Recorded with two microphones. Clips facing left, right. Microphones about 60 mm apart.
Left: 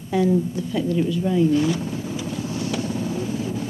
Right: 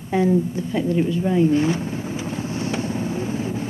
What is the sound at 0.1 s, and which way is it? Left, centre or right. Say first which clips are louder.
Speech: right 1 dB; right.